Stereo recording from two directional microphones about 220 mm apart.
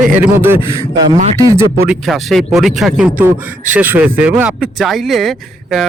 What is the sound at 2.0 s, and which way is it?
Speech, centre (ahead or behind).